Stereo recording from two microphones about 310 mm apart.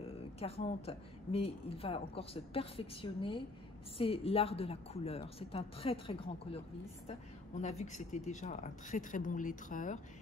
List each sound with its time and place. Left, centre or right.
0.0 s a woman's voice: centre